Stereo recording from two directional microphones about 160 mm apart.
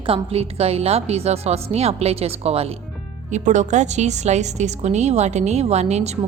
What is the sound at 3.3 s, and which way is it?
A woman's voice, 50° right (ahead or behind).